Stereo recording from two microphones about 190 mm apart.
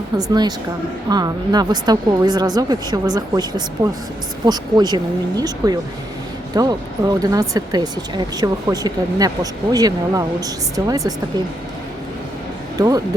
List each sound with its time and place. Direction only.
0.2 s speech: 20° right (ahead or behind)